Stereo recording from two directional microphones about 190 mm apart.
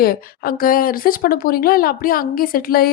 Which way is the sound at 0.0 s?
50° left (ahead or behind).